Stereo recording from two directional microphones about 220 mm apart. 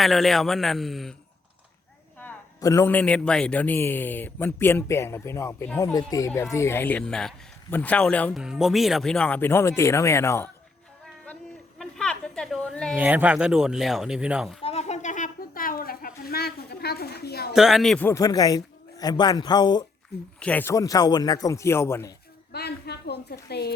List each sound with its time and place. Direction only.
0.0 s speech: centre (ahead or behind)
2.1 s a man's voice: 10° left (ahead or behind)
11.8 s a sound: 5° left (ahead or behind)
13.0 s speech: 5° right (ahead or behind)
14.6 s a sound: 25° left (ahead or behind); by 17.5 s 45° left (ahead or behind)
17.5 s a man's voice: centre (ahead or behind); by 19.8 s 20° left (ahead or behind)
20.4 s a man's voice: 5° left (ahead or behind)
22.5 s a woman's voice: 45° left (ahead or behind)